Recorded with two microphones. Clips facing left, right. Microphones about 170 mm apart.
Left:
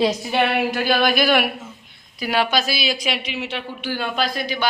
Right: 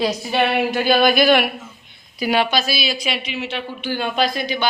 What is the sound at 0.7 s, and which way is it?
A woman's voice, centre (ahead or behind).